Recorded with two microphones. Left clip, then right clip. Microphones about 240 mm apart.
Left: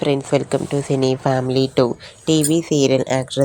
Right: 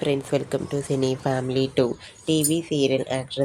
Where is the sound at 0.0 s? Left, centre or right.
Centre.